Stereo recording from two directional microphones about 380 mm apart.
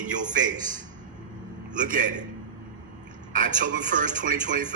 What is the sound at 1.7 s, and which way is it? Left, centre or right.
Speech, right.